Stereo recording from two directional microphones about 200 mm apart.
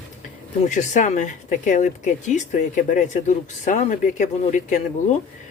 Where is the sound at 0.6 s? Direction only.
35° left (ahead or behind).